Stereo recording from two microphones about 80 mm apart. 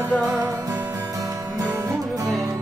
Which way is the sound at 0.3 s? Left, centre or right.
Right.